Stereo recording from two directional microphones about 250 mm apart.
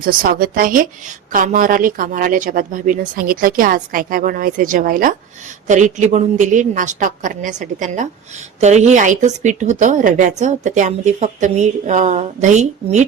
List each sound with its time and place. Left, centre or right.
0.0 s a woman's voice: right